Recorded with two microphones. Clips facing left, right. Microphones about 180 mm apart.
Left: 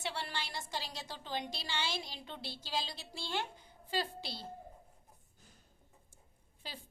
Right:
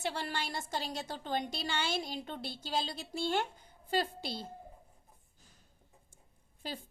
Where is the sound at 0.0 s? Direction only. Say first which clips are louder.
Right 4 dB; 45° right (ahead or behind).